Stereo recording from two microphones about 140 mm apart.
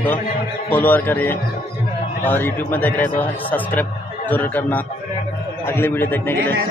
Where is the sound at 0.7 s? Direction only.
15° left (ahead or behind).